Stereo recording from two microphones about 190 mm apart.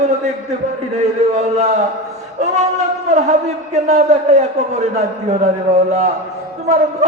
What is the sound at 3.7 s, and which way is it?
Speech, 40° right (ahead or behind).